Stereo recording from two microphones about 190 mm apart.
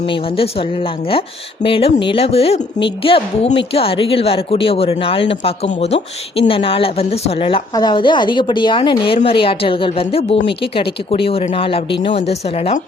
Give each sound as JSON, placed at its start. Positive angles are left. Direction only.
{"t": 1.6, "sound": "a woman's voice", "side_deg": 30}